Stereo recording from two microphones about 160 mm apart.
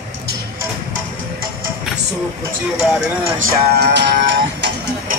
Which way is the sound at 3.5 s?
90° right.